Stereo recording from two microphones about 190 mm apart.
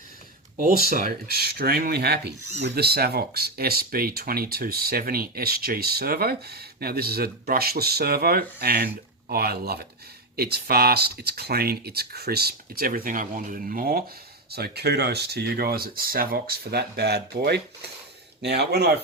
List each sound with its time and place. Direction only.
0.9 s speech: 50° right (ahead or behind)